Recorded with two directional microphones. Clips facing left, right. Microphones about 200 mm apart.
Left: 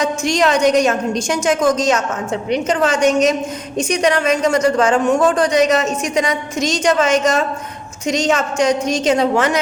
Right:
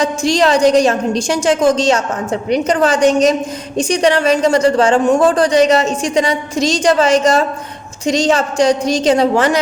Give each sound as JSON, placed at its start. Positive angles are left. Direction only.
{"t": 0.0, "sound": "speech", "side_deg": -35}